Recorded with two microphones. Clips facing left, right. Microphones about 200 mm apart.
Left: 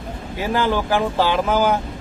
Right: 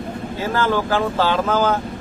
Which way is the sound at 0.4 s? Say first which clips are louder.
Even; 15° left (ahead or behind).